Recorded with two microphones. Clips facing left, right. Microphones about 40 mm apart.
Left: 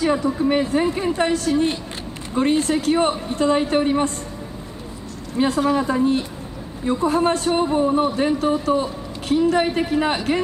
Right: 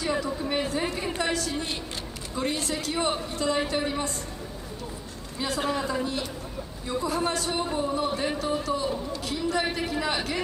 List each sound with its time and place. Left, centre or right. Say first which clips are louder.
0.0 s a man's voice: left 9 dB; left
5.4 s a woman's voice: left 9 dB; left